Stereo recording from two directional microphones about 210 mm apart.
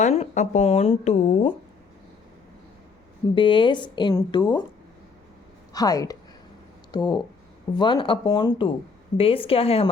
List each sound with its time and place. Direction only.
0.0 s speech: 30° left (ahead or behind)
3.3 s speech: 25° left (ahead or behind)
5.7 s a woman's voice: 15° left (ahead or behind)